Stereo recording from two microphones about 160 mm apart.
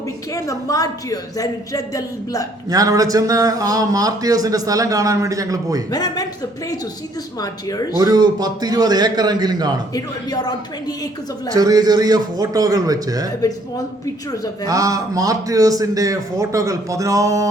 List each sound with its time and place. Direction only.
0.3 s a woman's voice: 20° left (ahead or behind)
2.6 s a man's voice: 20° right (ahead or behind)
5.9 s a woman's voice: 25° left (ahead or behind)
7.4 s a woman's voice: 20° left (ahead or behind)
7.9 s a man's voice: 25° right (ahead or behind)
9.9 s a woman's voice: 25° left (ahead or behind)
11.5 s a man's voice: 25° right (ahead or behind)
14.7 s a man's voice: 20° right (ahead or behind)